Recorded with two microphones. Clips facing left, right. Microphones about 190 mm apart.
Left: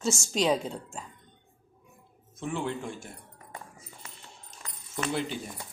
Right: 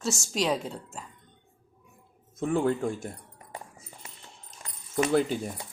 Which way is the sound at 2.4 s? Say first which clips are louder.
Right 7 dB; 45° right (ahead or behind).